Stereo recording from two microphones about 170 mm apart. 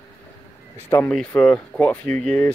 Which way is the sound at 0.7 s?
15° left (ahead or behind).